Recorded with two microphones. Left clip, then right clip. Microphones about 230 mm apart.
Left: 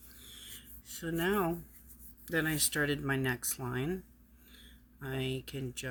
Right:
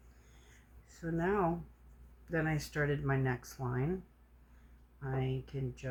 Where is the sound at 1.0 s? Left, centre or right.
Left.